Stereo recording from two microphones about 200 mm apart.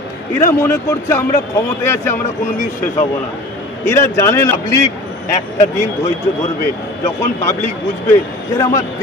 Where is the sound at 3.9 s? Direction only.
15° left (ahead or behind).